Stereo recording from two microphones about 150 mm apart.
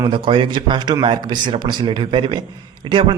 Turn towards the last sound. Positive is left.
turn(degrees=-35)  # may be behind; listen again after turning